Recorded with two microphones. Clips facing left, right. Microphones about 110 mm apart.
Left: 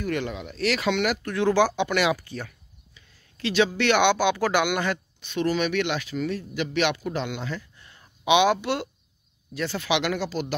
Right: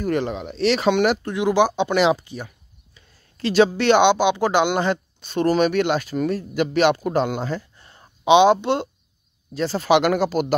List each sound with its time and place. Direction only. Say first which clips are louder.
0.0 s speech: right 5 dB; 35° right (ahead or behind)
1.2 s speech: right 3 dB; 15° right (ahead or behind)
2.9 s speech: right 4 dB; 40° right (ahead or behind)